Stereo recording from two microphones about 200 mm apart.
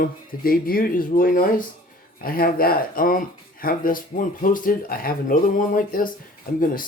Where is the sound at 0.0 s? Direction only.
45° left (ahead or behind).